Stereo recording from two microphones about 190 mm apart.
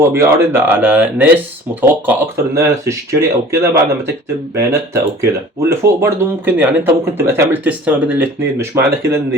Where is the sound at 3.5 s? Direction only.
15° right (ahead or behind).